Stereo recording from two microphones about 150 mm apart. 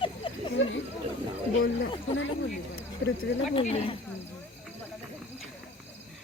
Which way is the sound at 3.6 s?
40° left (ahead or behind).